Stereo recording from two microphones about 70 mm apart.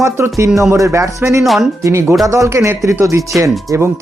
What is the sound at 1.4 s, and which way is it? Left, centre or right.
Speech, centre.